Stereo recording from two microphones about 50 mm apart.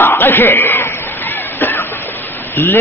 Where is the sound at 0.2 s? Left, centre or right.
Left.